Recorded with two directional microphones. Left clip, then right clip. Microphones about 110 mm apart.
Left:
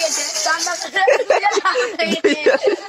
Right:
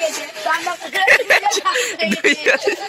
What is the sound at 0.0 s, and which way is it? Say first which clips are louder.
Snake: left 2 dB; 25° left (ahead or behind).